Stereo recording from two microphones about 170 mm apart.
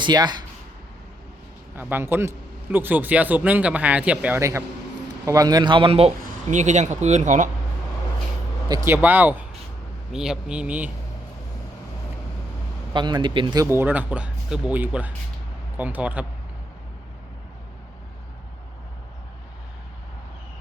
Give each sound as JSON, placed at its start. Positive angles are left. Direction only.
{"t": 0.0, "sound": "speech", "side_deg": -25}
{"t": 1.7, "sound": "a man's voice", "side_deg": -10}
{"t": 8.7, "sound": "speech", "side_deg": -15}
{"t": 12.9, "sound": "speech", "side_deg": -25}